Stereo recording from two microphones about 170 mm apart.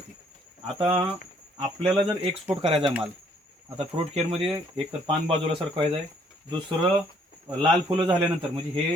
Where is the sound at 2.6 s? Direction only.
35° right (ahead or behind).